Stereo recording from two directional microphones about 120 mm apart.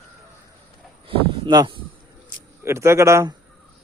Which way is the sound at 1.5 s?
35° right (ahead or behind).